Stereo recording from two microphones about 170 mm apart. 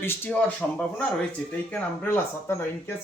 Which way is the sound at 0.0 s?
15° left (ahead or behind).